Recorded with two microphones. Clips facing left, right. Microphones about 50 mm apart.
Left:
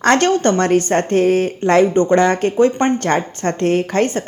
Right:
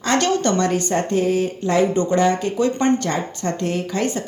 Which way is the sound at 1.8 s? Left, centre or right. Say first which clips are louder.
Left 5 dB; left.